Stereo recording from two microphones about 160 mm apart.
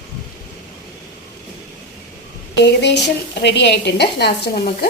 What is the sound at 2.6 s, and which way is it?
A woman's voice, 90° left.